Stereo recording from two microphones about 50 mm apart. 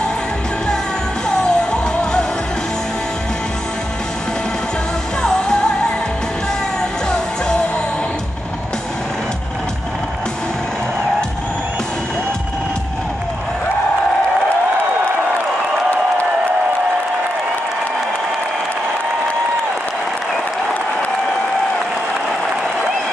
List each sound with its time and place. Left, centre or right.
1.3 s music: centre
5.2 s music: centre